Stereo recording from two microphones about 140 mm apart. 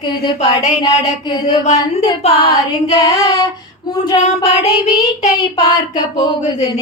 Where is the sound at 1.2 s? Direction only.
25° left (ahead or behind).